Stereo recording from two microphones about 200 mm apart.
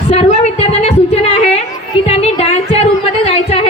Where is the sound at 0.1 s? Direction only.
35° left (ahead or behind).